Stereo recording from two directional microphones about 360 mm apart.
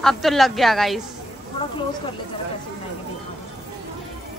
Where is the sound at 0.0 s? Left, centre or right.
Centre.